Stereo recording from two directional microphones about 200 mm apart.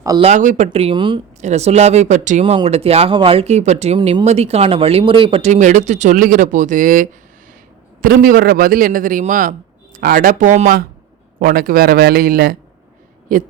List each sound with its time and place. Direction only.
0.0 s speech: 15° right (ahead or behind)
0.3 s a man's voice: 35° right (ahead or behind)